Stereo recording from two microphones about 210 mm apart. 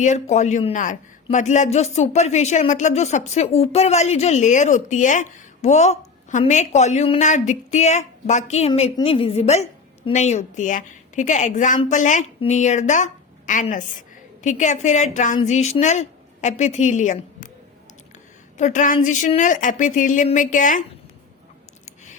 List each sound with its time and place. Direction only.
0.0 s a man's voice: 35° left (ahead or behind)
18.5 s a woman's voice: 35° left (ahead or behind)